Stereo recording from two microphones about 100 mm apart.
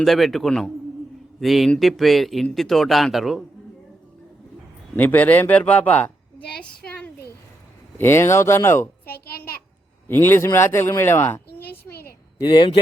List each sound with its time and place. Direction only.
0.0 s speech: centre (ahead or behind)
4.9 s speech: 15° left (ahead or behind)
7.9 s a woman's voice: 25° left (ahead or behind)
12.4 s speech: 55° left (ahead or behind)